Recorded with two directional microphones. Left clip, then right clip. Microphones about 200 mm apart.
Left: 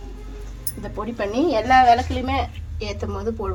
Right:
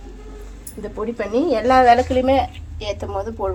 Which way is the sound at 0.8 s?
5° right (ahead or behind).